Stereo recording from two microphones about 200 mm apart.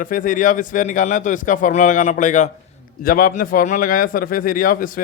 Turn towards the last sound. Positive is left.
turn(degrees=45)  # may be behind; listen again after turning